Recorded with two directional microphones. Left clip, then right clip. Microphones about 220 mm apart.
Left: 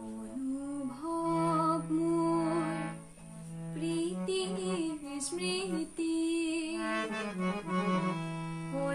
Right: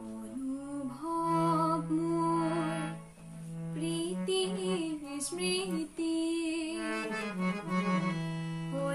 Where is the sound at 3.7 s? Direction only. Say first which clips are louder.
Left 1 dB; centre (ahead or behind).